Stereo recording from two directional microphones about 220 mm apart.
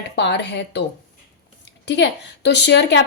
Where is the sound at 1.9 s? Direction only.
50° left (ahead or behind).